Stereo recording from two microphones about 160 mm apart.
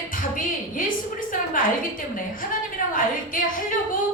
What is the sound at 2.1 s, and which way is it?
A woman's voice, 60° left (ahead or behind).